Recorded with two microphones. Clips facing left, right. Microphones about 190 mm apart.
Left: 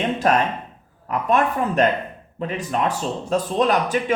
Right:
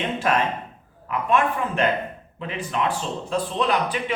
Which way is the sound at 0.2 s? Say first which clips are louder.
Left 2 dB; 40° left (ahead or behind).